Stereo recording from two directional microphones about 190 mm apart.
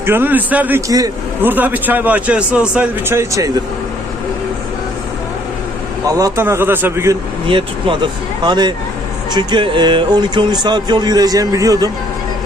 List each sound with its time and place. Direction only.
0.0 s a man's voice: 10° right (ahead or behind)
6.1 s a man's voice: 15° right (ahead or behind)
7.4 s speech: 25° right (ahead or behind)